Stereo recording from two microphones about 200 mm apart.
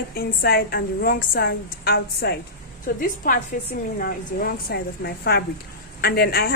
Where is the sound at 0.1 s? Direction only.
50° left (ahead or behind).